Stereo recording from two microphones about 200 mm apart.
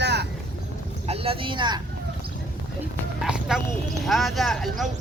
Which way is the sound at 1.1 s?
30° right (ahead or behind).